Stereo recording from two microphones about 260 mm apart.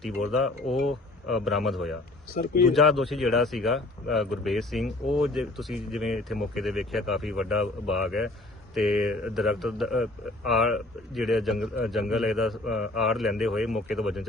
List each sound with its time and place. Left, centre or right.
0.0 s speech: centre